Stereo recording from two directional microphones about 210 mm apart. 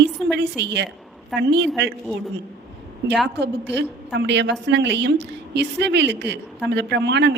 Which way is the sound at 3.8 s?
55° right (ahead or behind).